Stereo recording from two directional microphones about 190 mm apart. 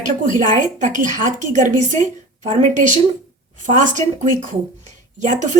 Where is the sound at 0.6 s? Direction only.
40° right (ahead or behind).